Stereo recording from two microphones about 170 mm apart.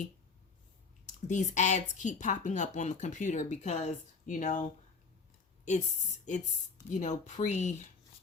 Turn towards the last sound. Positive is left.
turn(degrees=45)  # may be behind; listen again after turning